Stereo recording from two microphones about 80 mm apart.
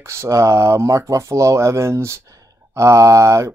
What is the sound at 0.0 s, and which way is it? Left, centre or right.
Speech, right.